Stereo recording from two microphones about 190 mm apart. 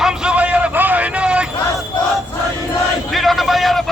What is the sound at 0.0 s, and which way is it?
Vehicle, 5° right (ahead or behind).